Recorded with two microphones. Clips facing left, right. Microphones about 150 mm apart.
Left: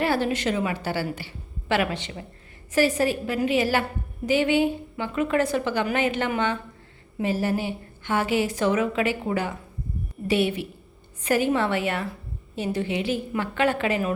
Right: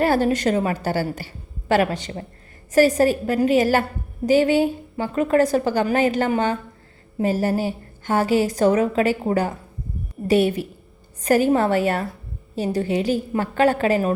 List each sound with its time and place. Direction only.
0.0 s a woman's voice: 45° right (ahead or behind)